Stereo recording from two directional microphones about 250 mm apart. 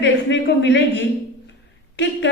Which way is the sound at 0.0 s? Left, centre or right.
Left.